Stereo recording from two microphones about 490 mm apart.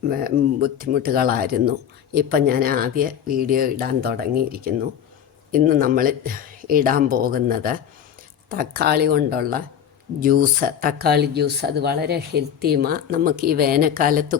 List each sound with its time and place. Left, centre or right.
0.0 s speech: centre